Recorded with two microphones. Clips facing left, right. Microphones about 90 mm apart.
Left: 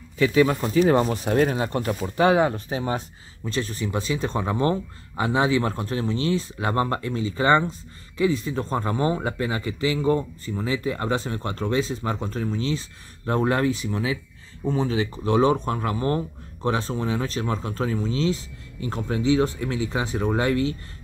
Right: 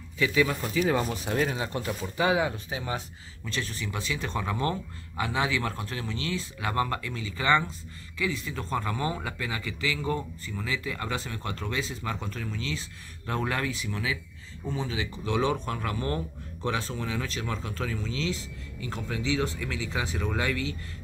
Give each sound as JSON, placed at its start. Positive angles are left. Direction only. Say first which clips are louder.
{"t": 0.2, "sound": "speech", "louder": "left 6 dB", "side_deg": 40}
{"t": 14.6, "sound": "speech", "louder": "left 8 dB", "side_deg": 45}